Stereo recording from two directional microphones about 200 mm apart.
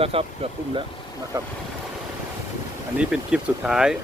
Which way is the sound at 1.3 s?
15° right (ahead or behind).